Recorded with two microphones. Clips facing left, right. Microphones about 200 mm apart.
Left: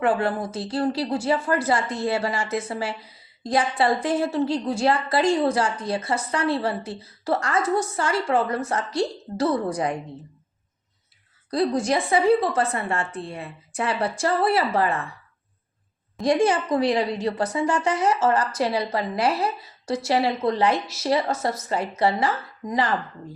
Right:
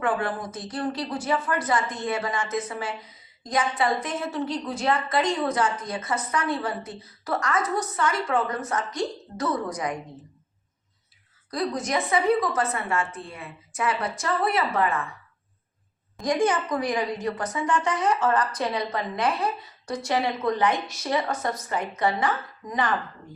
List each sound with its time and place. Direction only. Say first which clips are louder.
0.0 s a woman's voice: left 4 dB; 25° left (ahead or behind)
11.5 s a woman's voice: left 5 dB; 30° left (ahead or behind)
16.2 s a woman's voice: left 3 dB; 30° left (ahead or behind)